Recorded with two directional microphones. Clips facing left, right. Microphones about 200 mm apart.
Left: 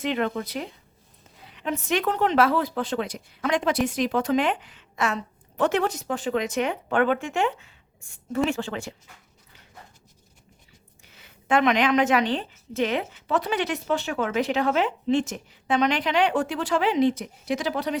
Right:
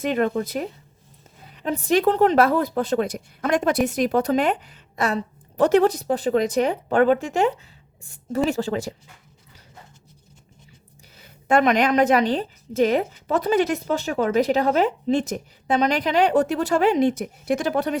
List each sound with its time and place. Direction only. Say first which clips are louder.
0.0 s a woman's voice: right 4 dB; 45° right (ahead or behind)
11.1 s a woman's voice: right 3 dB; 40° right (ahead or behind)